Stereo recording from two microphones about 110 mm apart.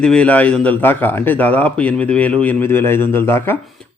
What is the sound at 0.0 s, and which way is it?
A man's voice, 10° left (ahead or behind).